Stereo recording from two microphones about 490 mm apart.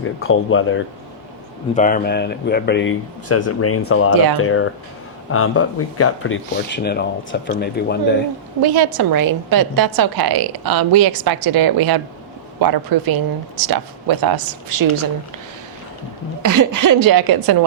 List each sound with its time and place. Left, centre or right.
0.0 s speech: left
8.6 s a woman's voice: right
16.4 s a woman's voice: right